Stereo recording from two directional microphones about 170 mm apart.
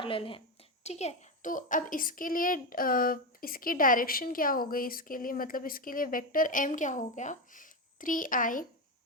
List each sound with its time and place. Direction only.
0.0 s a woman's voice: 30° left (ahead or behind); by 8.6 s 50° left (ahead or behind)